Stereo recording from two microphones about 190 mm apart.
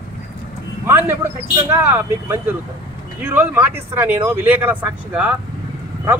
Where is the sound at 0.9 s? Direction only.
10° right (ahead or behind).